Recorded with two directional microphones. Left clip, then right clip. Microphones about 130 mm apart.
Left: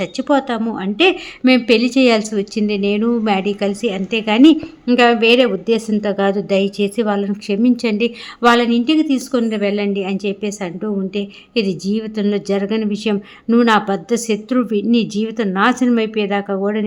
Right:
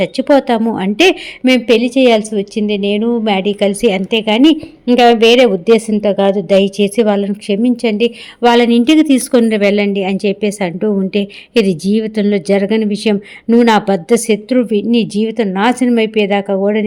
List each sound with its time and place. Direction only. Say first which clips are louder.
0.0 s a woman's voice: right 6 dB; 30° right (ahead or behind)
1.5 s speech: right 3 dB; 15° right (ahead or behind)
3.7 s a woman's voice: right 7 dB; 35° right (ahead or behind)
4.1 s speech: left 2 dB; 20° right (ahead or behind)
4.9 s a woman's voice: right 4 dB; 25° right (ahead or behind)
6.0 s a woman's voice: right 5 dB; 15° right (ahead or behind)
8.7 s a woman's voice: right 6 dB; 55° right (ahead or behind)
9.4 s a woman's voice: right 7 dB; 45° right (ahead or behind); by 16.6 s 25° right (ahead or behind)